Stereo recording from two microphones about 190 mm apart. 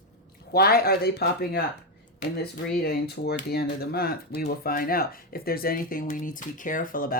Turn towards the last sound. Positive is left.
turn(degrees=50)  # may be behind; listen again after turning